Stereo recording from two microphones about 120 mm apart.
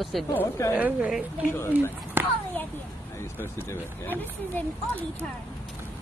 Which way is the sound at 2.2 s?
15° right (ahead or behind).